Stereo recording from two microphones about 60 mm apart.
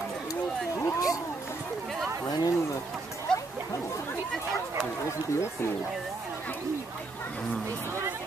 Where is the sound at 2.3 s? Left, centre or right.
Left.